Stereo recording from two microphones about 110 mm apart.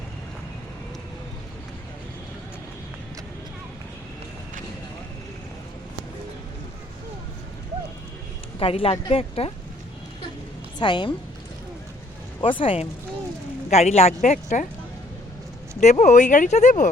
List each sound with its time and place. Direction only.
8.5 s speech: 60° left (ahead or behind)
10.8 s speech: 45° left (ahead or behind)
12.4 s speech: 50° left (ahead or behind)
13.7 s a woman's voice: 85° left
15.8 s speech: 90° left